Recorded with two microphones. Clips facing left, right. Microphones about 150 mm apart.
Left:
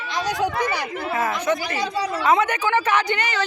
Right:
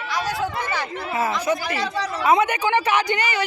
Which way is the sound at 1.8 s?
10° left (ahead or behind).